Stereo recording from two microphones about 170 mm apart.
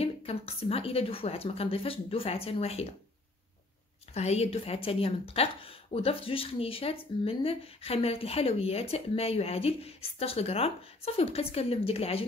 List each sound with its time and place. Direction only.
0.0 s speech: 35° left (ahead or behind)
4.1 s speech: 40° left (ahead or behind)